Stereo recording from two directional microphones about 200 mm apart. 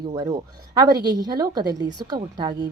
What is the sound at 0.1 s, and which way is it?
A woman's voice, 20° right (ahead or behind).